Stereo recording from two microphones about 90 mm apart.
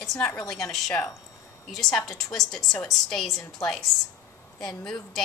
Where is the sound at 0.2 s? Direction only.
15° left (ahead or behind).